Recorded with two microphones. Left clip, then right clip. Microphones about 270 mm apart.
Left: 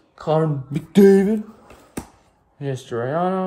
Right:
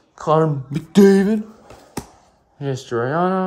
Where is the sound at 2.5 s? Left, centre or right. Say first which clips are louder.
Right 3 dB; right.